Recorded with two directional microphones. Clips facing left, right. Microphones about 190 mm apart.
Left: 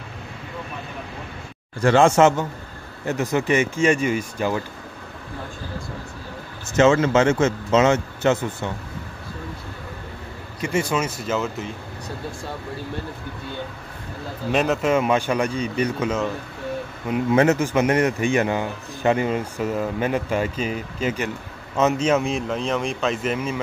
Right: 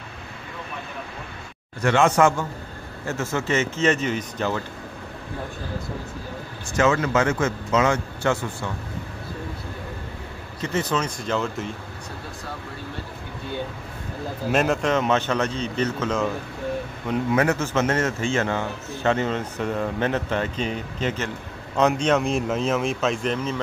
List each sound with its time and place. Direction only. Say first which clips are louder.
1.8 s a man's voice: left 3 dB; 30° left (ahead or behind); by 4.6 s 10° left (ahead or behind)
6.7 s a man's voice: left 4 dB; 25° left (ahead or behind)
10.6 s a man's voice: left 2 dB; 10° left (ahead or behind)
14.5 s a man's voice: left 2 dB; centre (ahead or behind)
17.3 s a man's voice: left 5 dB; 25° left (ahead or behind)